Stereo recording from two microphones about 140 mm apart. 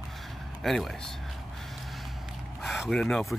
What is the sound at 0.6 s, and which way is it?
Speech, centre (ahead or behind).